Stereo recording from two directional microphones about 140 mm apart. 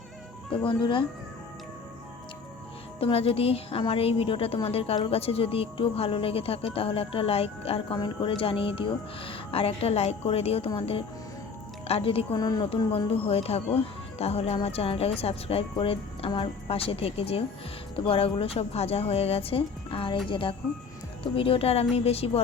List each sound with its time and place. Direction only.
0.5 s a woman's voice: 35° left (ahead or behind)
3.0 s a woman's voice: 40° left (ahead or behind)
12.4 s speech: 30° left (ahead or behind)
13.1 s a woman's voice: 45° left (ahead or behind)